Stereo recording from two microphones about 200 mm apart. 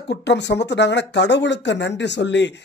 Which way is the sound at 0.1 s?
60° left (ahead or behind).